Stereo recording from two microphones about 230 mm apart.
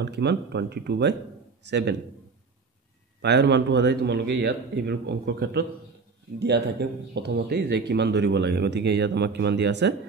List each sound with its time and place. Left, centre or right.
0.0 s speech: right
3.2 s speech: right